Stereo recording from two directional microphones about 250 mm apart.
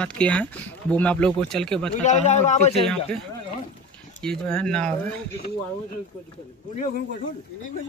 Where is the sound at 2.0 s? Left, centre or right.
Left.